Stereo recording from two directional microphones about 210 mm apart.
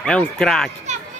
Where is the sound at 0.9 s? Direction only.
35° right (ahead or behind).